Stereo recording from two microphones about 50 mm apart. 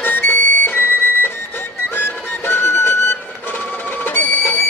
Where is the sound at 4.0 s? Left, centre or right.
Left.